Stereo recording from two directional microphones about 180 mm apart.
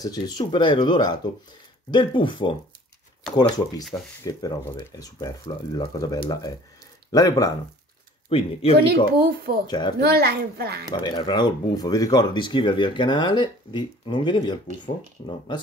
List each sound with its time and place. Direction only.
0.0 s speech: 20° left (ahead or behind)
8.3 s speech: 30° left (ahead or behind)
9.2 s a woman's voice: 60° right (ahead or behind)
9.7 s speech: 25° left (ahead or behind)
9.9 s a woman's voice: 65° right (ahead or behind)
10.9 s speech: 25° left (ahead or behind)